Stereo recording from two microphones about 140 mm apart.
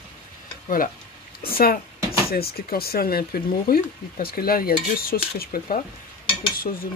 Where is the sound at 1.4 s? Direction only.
90° left.